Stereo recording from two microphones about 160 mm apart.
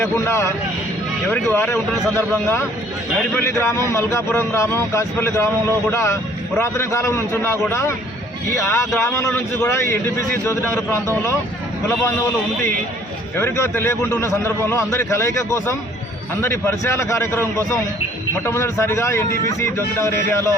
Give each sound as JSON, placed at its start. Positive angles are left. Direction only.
{"t": 0.0, "sound": "a man's voice", "side_deg": 15}
{"t": 13.3, "sound": "a man's voice", "side_deg": 15}